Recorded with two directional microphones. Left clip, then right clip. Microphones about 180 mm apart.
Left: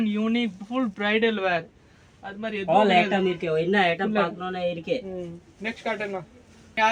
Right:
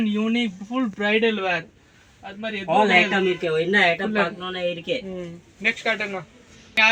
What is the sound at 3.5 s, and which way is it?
Speech, 15° left (ahead or behind).